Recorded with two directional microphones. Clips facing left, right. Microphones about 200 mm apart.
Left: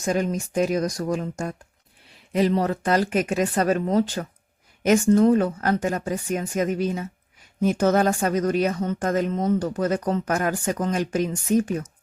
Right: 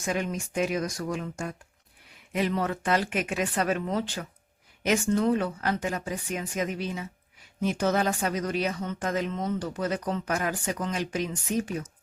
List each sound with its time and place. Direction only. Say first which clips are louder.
0.0 s speech: left 6 dB; 40° left (ahead or behind)